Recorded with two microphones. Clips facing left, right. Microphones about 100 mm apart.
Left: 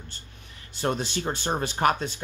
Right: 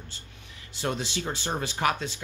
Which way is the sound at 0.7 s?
50° left (ahead or behind).